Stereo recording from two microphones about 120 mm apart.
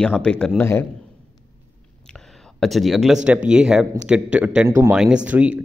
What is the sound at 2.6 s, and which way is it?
Speech, centre (ahead or behind).